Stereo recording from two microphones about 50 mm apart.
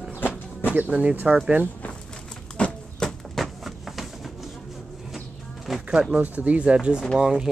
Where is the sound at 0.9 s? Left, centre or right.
Right.